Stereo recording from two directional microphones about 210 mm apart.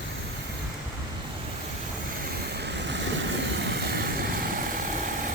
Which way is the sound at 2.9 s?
60° right (ahead or behind).